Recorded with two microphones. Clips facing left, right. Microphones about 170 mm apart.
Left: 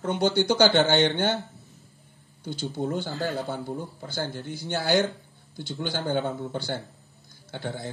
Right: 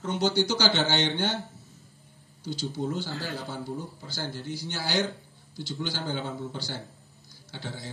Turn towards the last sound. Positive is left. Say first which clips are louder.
# left 6 dB
turn(degrees=55)  # may be behind; listen again after turning